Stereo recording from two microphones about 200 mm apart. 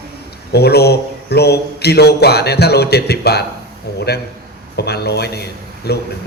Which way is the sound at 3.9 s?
55° left (ahead or behind).